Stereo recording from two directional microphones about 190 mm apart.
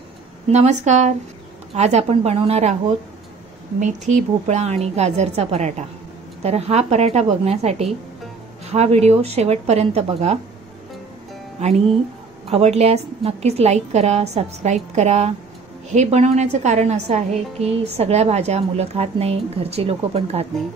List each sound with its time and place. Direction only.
0.5 s a woman's voice: 35° right (ahead or behind)
4.1 s a woman's voice: 35° right (ahead or behind)
11.6 s a woman's voice: 35° right (ahead or behind)